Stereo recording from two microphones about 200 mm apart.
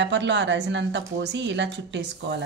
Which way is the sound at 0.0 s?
60° right (ahead or behind).